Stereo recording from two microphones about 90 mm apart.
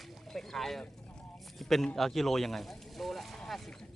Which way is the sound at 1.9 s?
Centre (ahead or behind).